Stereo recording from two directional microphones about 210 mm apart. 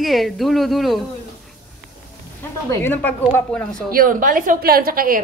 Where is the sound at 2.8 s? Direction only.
10° left (ahead or behind).